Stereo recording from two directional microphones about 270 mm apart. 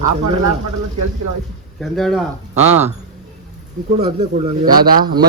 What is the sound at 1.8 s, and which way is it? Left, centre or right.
Speech, centre.